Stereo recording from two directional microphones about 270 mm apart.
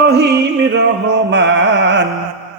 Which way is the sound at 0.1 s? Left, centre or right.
Right.